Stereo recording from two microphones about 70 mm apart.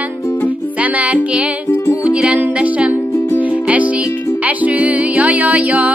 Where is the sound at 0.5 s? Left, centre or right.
Right.